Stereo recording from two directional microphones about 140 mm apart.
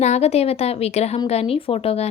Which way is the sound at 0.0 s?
50° left (ahead or behind).